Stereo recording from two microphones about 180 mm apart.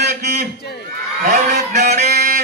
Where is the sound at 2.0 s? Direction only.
60° right (ahead or behind).